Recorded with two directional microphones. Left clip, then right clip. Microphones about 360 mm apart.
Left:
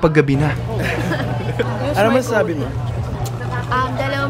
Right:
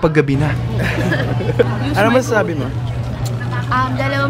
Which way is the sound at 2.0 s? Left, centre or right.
Centre.